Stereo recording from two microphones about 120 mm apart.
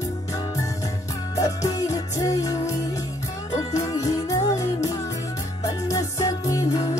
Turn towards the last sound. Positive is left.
turn(degrees=30)  # may be behind; listen again after turning